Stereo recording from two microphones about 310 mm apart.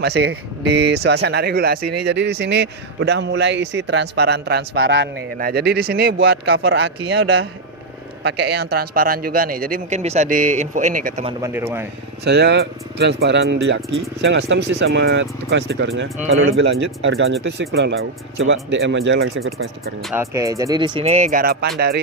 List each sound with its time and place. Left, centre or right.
0.0 s a man's voice: right
11.4 s speech: centre
12.2 s a man's voice: right
20.0 s speech: centre; by 22.0 s right